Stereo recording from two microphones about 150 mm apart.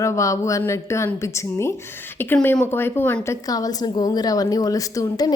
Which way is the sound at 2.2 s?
15° left (ahead or behind).